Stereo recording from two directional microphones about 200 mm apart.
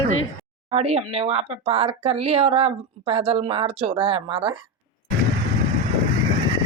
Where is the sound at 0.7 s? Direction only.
30° right (ahead or behind).